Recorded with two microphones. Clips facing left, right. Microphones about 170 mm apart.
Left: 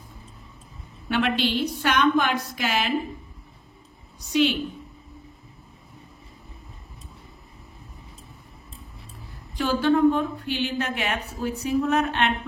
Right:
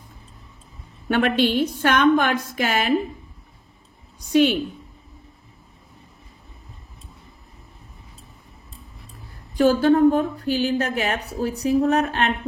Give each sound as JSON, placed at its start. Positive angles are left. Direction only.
{"t": 1.0, "sound": "a woman's voice", "side_deg": -50}
{"t": 4.3, "sound": "a woman's voice", "side_deg": -50}
{"t": 9.6, "sound": "a woman's voice", "side_deg": -45}